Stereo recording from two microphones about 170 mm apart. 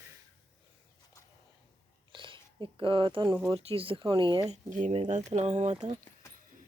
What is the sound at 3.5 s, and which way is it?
Speech, 35° right (ahead or behind).